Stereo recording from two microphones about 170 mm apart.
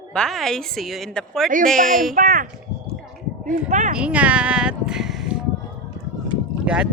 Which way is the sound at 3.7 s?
50° right (ahead or behind).